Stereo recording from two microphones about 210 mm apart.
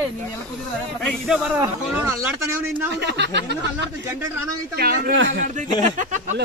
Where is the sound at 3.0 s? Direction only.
55° right (ahead or behind).